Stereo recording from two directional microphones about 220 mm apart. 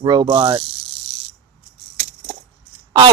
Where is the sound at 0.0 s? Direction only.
20° right (ahead or behind).